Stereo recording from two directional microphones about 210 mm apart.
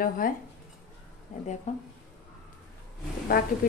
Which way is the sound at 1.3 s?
40° left (ahead or behind).